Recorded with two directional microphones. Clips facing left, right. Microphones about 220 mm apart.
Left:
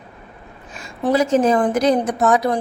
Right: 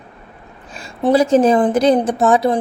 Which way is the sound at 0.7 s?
30° right (ahead or behind).